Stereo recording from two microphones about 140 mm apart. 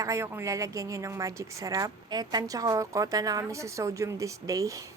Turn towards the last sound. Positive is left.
turn(degrees=-25)  # may be behind; listen again after turning